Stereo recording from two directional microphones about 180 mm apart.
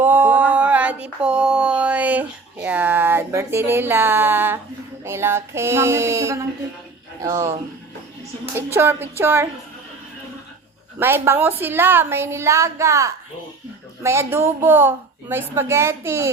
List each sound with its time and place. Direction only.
0.0 s a sound: 10° right (ahead or behind)
5.0 s a woman's voice: 15° right (ahead or behind)
8.5 s a woman's voice: 15° right (ahead or behind)
11.0 s a woman's voice: 10° right (ahead or behind)